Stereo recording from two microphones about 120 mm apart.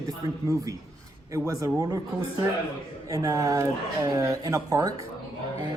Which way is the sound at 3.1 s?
25° right (ahead or behind).